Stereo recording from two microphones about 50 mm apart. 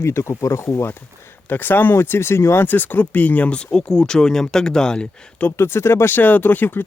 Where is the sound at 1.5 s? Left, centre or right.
Left.